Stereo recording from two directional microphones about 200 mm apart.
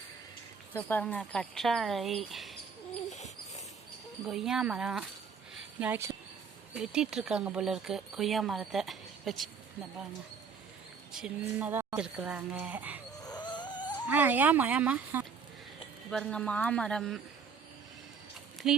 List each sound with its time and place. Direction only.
0.7 s speech: 10° left (ahead or behind)
3.1 s dog: 35° left (ahead or behind)
4.3 s speech: centre (ahead or behind)
5.5 s a sound: 10° right (ahead or behind)
6.7 s speech: 5° right (ahead or behind)
11.1 s speech: 5° right (ahead or behind)
13.2 s a sound: 20° left (ahead or behind)
14.1 s speech: 10° right (ahead or behind)
16.0 s speech: 5° left (ahead or behind)
18.6 s speech: 5° right (ahead or behind)